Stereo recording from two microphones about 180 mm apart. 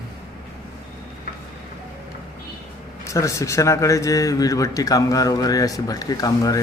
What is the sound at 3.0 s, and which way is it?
A man's voice, 15° left (ahead or behind).